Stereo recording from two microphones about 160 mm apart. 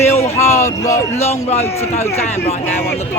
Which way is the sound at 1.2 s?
40° left (ahead or behind).